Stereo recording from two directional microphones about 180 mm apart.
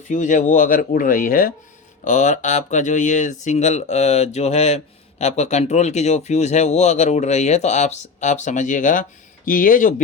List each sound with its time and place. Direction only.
0.1 s speech: 45° left (ahead or behind)